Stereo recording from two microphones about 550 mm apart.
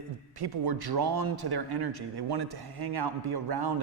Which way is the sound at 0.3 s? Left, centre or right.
Right.